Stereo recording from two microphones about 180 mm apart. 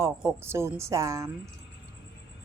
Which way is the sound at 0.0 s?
15° right (ahead or behind).